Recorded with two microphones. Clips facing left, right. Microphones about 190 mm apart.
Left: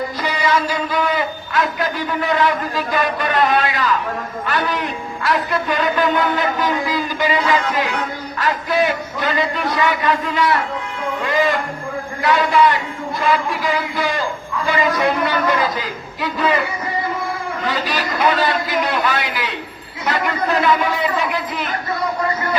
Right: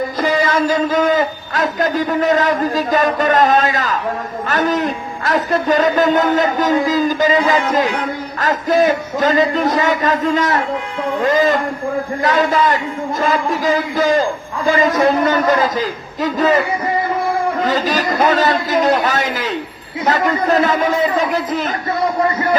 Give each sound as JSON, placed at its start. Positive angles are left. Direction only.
{"t": 0.2, "sound": "a man's voice", "side_deg": -50}
{"t": 17.6, "sound": "a man's voice", "side_deg": -45}